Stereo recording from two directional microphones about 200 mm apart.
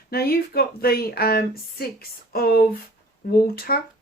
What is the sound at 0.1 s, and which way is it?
Speech, 50° left (ahead or behind).